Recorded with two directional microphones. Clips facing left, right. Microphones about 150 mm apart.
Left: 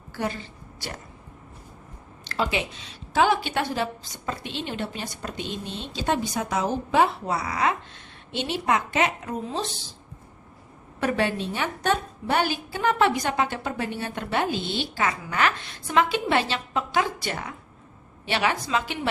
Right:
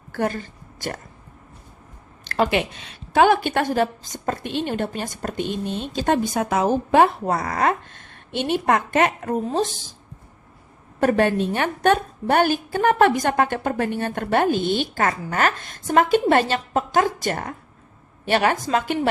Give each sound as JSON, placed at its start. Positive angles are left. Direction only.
{"t": 0.1, "sound": "a woman's voice", "side_deg": -50}
{"t": 2.3, "sound": "a woman's voice", "side_deg": -55}
{"t": 11.0, "sound": "a woman's voice", "side_deg": -50}